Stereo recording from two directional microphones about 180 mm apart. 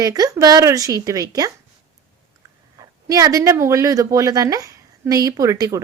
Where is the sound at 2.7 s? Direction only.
20° right (ahead or behind).